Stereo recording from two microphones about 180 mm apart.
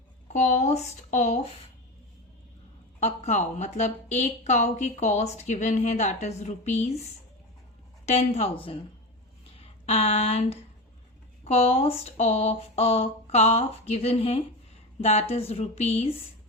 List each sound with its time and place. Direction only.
0.3 s speech: 40° left (ahead or behind)
3.0 s speech: 40° left (ahead or behind)
8.0 s speech: 35° left (ahead or behind)